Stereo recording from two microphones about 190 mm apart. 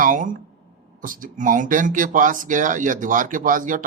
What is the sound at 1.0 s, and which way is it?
Speech, 45° right (ahead or behind).